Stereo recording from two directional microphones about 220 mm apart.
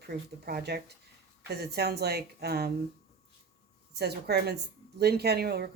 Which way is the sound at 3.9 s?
50° right (ahead or behind).